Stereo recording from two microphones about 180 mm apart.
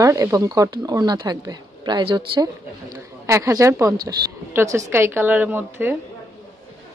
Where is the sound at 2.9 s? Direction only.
15° right (ahead or behind).